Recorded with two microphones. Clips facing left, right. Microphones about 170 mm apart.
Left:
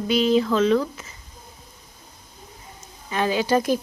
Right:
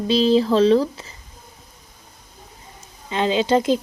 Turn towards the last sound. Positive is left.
turn(degrees=-20)  # may be behind; listen again after turning